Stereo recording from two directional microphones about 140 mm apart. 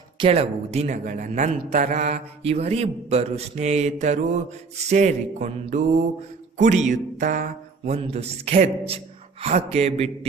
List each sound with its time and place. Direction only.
0.2 s a man's voice: 45° right (ahead or behind)
4.9 s mantra: 55° right (ahead or behind)
6.6 s a man's voice: 60° right (ahead or behind)
8.1 s a man's voice: 50° right (ahead or behind)